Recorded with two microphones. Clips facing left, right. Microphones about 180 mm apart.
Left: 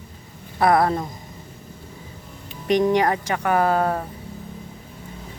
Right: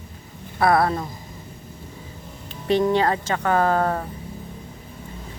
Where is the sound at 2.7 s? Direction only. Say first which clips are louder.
Left 1 dB; 15° left (ahead or behind).